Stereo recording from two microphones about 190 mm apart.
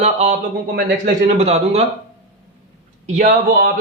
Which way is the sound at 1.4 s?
35° right (ahead or behind).